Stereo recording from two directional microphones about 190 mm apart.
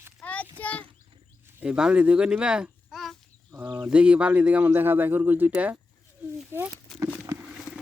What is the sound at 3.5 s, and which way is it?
Speech, 15° right (ahead or behind).